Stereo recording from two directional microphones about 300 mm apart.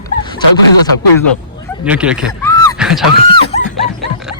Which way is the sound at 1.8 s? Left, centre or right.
Centre.